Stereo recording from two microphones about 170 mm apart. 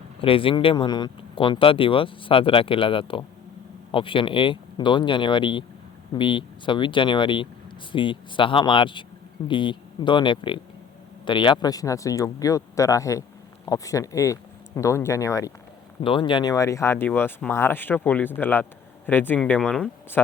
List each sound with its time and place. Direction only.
0.2 s speech: 30° left (ahead or behind)
16.0 s speech: 30° left (ahead or behind); by 20.2 s 10° left (ahead or behind)